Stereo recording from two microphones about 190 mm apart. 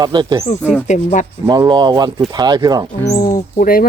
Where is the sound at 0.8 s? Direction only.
40° left (ahead or behind).